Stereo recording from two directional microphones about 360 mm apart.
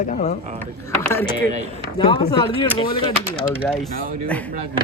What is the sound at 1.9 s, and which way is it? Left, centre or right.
Speech, centre.